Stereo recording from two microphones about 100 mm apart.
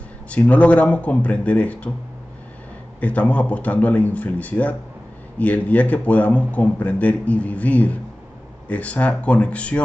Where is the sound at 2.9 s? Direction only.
15° left (ahead or behind).